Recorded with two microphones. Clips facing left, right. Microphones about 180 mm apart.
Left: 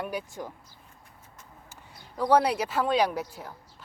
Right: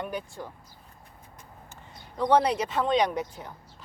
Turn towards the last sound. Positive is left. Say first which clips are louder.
# even
turn(degrees=5)  # may be behind; listen again after turning